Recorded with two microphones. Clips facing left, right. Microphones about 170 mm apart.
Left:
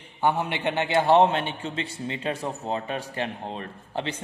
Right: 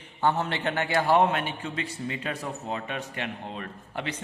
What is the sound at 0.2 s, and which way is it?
A man's voice, 15° left (ahead or behind).